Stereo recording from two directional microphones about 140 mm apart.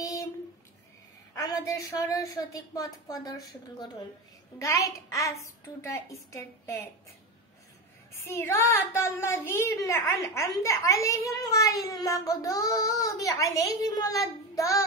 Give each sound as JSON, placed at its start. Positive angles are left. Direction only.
{"t": 0.0, "sound": "a sound", "side_deg": 25}
{"t": 1.3, "sound": "speech", "side_deg": 25}
{"t": 8.1, "sound": "speech", "side_deg": 20}